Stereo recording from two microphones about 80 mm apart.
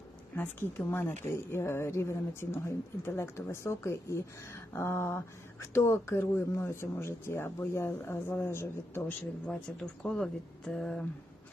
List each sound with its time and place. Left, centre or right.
0.3 s speech: left
9.5 s speech: centre